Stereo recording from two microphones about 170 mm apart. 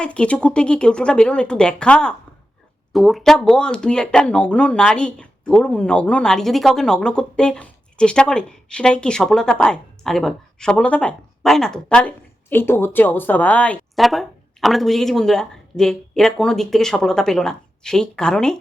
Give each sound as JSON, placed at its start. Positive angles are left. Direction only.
{"t": 0.0, "sound": "speech", "side_deg": 5}